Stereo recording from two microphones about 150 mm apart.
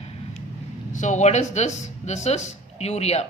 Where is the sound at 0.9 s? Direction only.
55° left (ahead or behind).